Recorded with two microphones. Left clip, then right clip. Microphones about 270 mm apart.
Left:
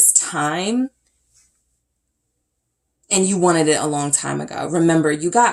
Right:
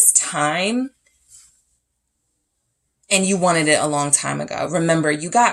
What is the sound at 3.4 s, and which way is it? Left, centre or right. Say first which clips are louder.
Speech: left 2 dB; right.